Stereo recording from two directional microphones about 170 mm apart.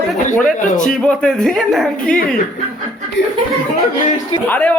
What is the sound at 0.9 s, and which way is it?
Speech, 5° left (ahead or behind).